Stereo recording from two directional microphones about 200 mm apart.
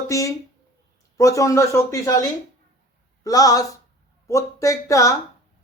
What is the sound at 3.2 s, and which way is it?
Speech, 15° left (ahead or behind).